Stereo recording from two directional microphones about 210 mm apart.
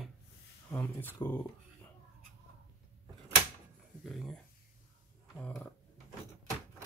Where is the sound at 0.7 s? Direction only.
10° left (ahead or behind).